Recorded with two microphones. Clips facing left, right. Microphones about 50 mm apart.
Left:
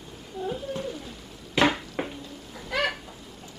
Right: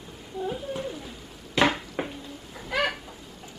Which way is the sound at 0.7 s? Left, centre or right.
Centre.